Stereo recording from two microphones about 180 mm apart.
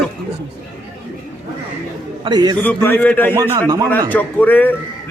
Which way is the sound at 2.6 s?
10° left (ahead or behind).